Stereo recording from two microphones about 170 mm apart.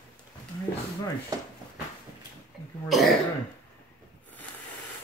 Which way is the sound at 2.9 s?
Centre (ahead or behind).